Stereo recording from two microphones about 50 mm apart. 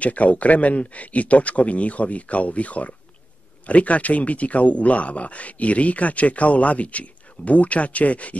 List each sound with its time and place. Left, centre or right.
0.0 s speech: left